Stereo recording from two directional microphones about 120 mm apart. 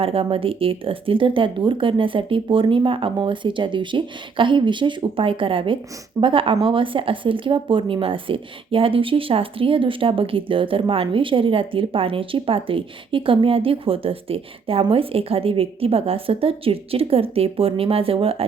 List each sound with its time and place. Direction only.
0.0 s a woman's voice: 50° right (ahead or behind)